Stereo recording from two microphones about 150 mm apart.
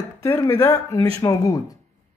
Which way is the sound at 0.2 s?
20° left (ahead or behind).